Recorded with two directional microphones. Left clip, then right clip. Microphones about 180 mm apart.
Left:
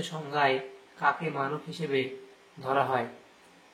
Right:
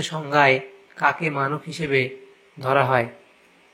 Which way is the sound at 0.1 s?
35° right (ahead or behind).